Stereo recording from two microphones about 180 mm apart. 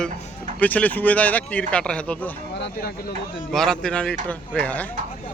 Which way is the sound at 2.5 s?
65° left (ahead or behind).